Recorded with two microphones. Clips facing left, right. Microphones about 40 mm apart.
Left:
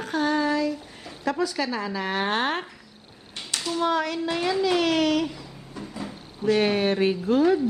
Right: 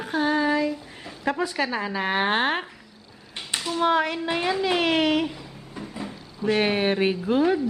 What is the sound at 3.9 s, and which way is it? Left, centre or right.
Speech, right.